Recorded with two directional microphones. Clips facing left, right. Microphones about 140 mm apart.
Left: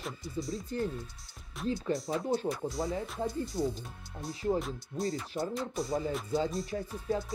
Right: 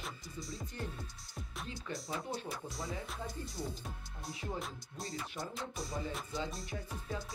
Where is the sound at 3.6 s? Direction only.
25° left (ahead or behind).